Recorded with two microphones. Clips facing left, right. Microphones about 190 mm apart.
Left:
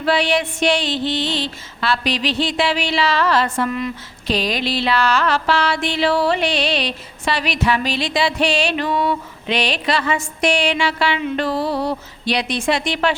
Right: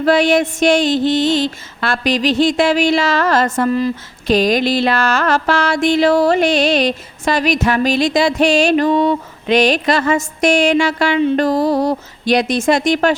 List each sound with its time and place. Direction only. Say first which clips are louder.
0.0 s music: right 6 dB; 45° right (ahead or behind)
4.3 s music: right 7 dB; 45° right (ahead or behind)